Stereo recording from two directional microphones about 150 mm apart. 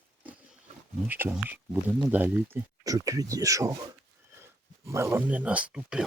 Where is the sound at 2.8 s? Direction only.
25° right (ahead or behind).